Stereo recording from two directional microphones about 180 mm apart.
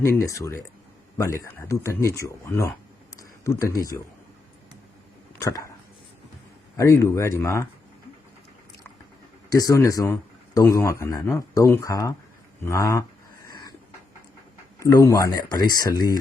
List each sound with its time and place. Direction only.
0.2 s speech: 15° left (ahead or behind)
5.4 s dog: 15° left (ahead or behind)
6.7 s speech: 15° left (ahead or behind)
9.5 s speech: 20° left (ahead or behind)
13.5 s a sound: 20° left (ahead or behind)
14.8 s speech: 20° left (ahead or behind)